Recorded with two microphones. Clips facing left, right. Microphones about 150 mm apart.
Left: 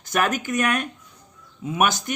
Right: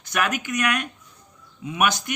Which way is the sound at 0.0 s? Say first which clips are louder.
Left 2 dB; 45° left (ahead or behind).